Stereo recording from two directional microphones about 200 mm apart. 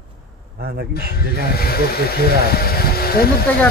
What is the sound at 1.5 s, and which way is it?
Speech, 50° left (ahead or behind).